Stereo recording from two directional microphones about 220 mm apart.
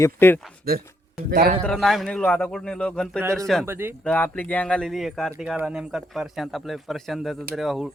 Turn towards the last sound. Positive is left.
turn(degrees=0)  # may be behind; listen again after turning